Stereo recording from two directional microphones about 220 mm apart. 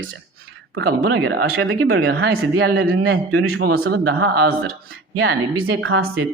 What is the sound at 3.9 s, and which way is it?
Speech, 45° right (ahead or behind).